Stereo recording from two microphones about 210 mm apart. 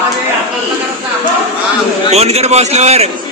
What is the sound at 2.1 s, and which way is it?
Speech, 30° right (ahead or behind).